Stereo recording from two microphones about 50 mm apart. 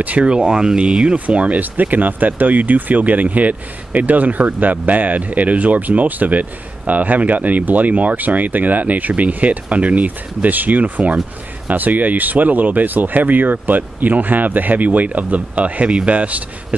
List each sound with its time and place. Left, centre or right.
0.0 s speech: right